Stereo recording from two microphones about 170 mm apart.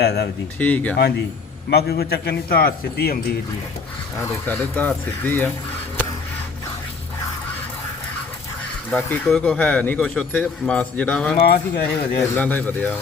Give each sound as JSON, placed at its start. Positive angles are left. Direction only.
{"t": 0.0, "sound": "a man's voice", "side_deg": 75}
{"t": 0.6, "sound": "a man's voice", "side_deg": 10}
{"t": 1.7, "sound": "a man's voice", "side_deg": 70}
{"t": 4.2, "sound": "a man's voice", "side_deg": 15}
{"t": 8.9, "sound": "a man's voice", "side_deg": 10}
{"t": 11.3, "sound": "speech", "side_deg": 60}
{"t": 12.2, "sound": "a man's voice", "side_deg": 10}